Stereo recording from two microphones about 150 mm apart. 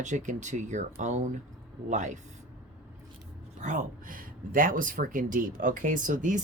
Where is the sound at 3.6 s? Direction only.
60° right (ahead or behind).